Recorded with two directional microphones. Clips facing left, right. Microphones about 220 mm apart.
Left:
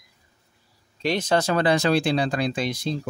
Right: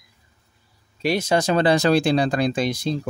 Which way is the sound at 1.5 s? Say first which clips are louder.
Right 5 dB; 35° right (ahead or behind).